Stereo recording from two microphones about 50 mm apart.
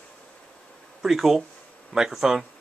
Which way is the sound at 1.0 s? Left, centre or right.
Centre.